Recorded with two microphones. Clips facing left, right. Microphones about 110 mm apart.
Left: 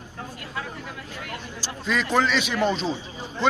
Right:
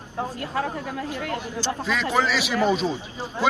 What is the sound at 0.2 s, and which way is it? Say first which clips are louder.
Speech: right 8 dB; 40° right (ahead or behind).